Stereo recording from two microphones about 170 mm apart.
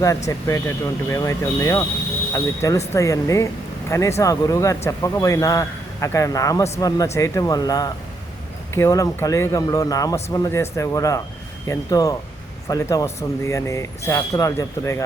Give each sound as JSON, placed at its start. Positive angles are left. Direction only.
{"t": 0.3, "sound": "a man's voice", "side_deg": 20}